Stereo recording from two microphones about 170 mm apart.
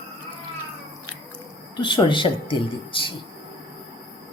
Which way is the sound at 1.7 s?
25° left (ahead or behind).